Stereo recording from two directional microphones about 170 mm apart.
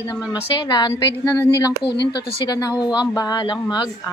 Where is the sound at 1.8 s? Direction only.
80° left.